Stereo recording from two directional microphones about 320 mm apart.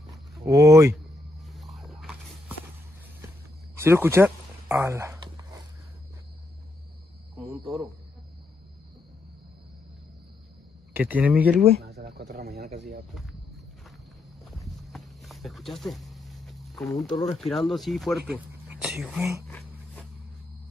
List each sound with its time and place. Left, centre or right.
0.5 s speech: centre
1.4 s walk: centre
3.7 s a sound: centre
10.9 s speech: centre
11.8 s speech: right
14.6 s a sound: centre
17.4 s speech: centre